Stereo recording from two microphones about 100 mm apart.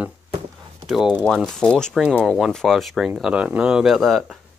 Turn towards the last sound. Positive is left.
turn(degrees=0)  # may be behind; listen again after turning